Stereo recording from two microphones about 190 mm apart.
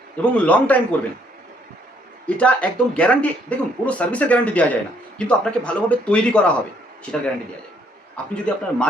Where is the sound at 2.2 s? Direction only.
5° left (ahead or behind).